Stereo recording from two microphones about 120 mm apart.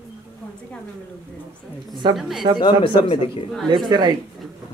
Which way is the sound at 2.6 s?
40° left (ahead or behind).